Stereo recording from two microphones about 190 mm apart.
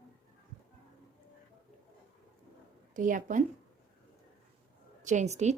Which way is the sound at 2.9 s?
45° right (ahead or behind).